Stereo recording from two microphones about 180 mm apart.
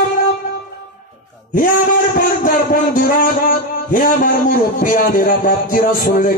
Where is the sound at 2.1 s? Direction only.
50° left (ahead or behind).